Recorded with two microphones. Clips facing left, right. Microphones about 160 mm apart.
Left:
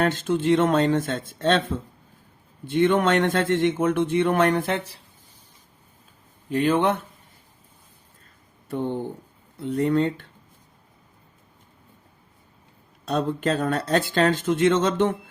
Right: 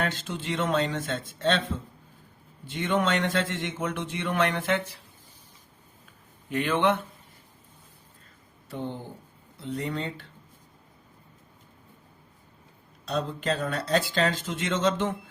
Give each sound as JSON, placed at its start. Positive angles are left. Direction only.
{"t": 0.0, "sound": "a man's voice", "side_deg": 50}
{"t": 6.5, "sound": "speech", "side_deg": 35}
{"t": 9.6, "sound": "a man's voice", "side_deg": 50}
{"t": 13.1, "sound": "a man's voice", "side_deg": 50}